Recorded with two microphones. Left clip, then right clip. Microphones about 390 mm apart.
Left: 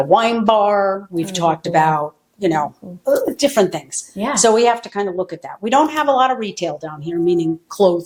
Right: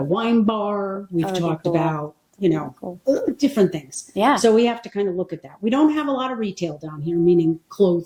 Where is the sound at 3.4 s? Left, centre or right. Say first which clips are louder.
Left 4 dB; left.